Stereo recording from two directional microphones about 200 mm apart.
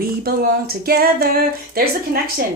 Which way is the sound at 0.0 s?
50° right (ahead or behind).